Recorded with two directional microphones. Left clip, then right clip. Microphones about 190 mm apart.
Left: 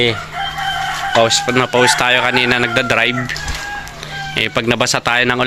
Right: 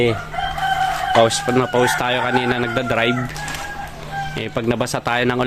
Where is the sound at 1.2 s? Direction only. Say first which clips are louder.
Left 3 dB; 10° right (ahead or behind).